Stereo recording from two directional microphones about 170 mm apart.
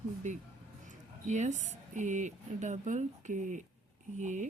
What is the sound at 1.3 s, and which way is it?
Speech, 45° right (ahead or behind).